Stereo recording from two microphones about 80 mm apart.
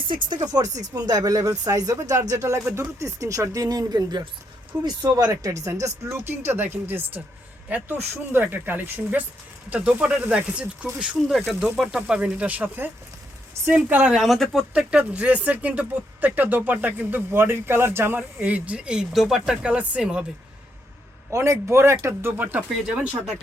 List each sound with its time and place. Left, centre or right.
0.0 s speech: right
0.3 s speech: right
5.0 s speech: right
6.2 s speech: right; by 11.3 s centre
11.3 s speech: centre
14.2 s speech: centre
14.7 s speech: centre; by 18.2 s right
18.3 s speech: centre
21.2 s speech: right